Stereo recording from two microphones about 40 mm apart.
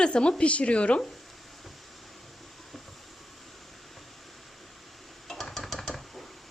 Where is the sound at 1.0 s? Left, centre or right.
Centre.